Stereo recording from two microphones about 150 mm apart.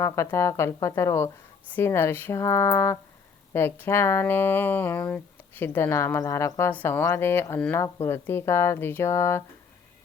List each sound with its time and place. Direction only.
0.0 s speech: 20° left (ahead or behind)